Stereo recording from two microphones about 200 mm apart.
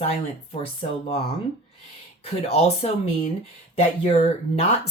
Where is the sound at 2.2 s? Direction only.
30° left (ahead or behind).